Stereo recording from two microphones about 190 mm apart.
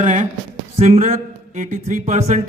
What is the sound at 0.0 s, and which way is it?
A man's voice, 40° right (ahead or behind).